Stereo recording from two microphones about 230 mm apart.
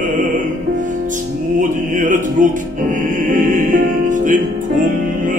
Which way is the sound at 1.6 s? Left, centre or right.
Right.